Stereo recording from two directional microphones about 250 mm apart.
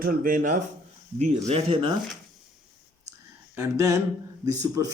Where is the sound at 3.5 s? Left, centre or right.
Centre.